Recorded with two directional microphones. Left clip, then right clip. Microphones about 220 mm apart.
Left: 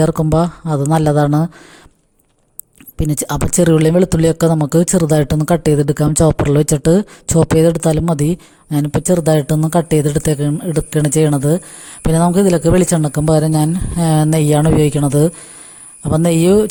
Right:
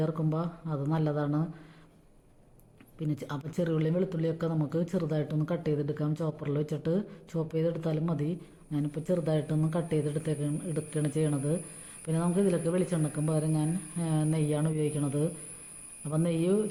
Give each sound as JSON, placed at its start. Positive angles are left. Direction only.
{"t": 0.0, "sound": "speech", "side_deg": 45}
{"t": 3.0, "sound": "speech", "side_deg": 50}